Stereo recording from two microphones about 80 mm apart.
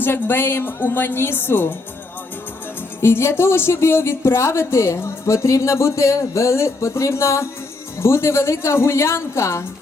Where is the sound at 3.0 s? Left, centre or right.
Left.